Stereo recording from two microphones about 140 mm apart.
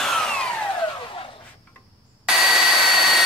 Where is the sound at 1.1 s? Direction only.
40° left (ahead or behind).